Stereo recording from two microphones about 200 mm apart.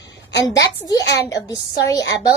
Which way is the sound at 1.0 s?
60° left (ahead or behind).